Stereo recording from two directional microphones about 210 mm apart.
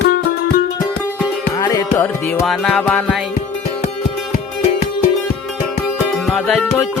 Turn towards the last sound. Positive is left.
turn(degrees=5)  # may be behind; listen again after turning